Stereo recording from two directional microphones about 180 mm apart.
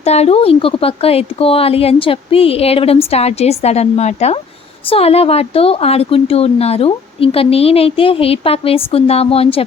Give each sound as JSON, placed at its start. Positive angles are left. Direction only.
{"t": 0.0, "sound": "speech", "side_deg": 35}